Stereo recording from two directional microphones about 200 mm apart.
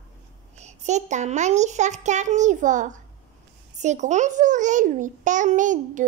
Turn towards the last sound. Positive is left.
turn(degrees=-40)  # may be behind; listen again after turning